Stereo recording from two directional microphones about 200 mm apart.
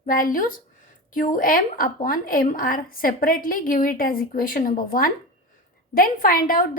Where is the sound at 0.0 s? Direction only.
45° left (ahead or behind).